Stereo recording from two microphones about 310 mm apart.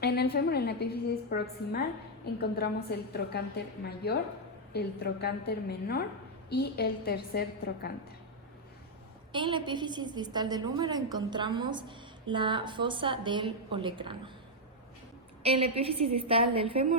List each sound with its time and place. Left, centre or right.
0.0 s a woman's voice: left
9.3 s a woman's voice: centre
15.4 s a woman's voice: centre